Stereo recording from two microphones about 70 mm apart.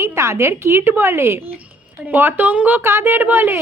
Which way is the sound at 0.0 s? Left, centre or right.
Right.